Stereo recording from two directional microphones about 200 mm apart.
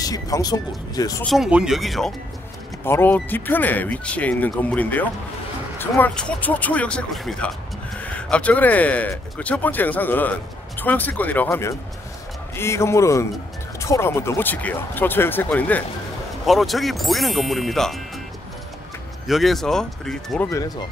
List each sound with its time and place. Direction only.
0.0 s speech: 20° left (ahead or behind)
1.2 s speech: centre (ahead or behind)
2.8 s speech: 10° left (ahead or behind)
19.2 s speech: centre (ahead or behind)
20.4 s speech: 15° left (ahead or behind)